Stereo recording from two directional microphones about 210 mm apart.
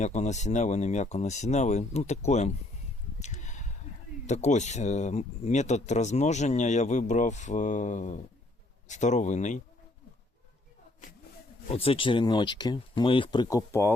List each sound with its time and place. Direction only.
0.0 s speech: 35° left (ahead or behind)
3.2 s a sound: 35° left (ahead or behind)
4.3 s speech: 35° left (ahead or behind)
11.7 s speech: 25° left (ahead or behind)